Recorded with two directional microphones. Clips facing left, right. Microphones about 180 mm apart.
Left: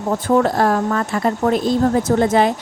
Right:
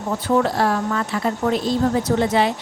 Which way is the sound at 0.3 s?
45° left (ahead or behind).